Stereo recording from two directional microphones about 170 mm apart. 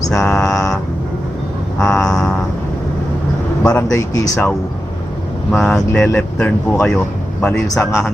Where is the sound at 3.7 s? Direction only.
15° left (ahead or behind).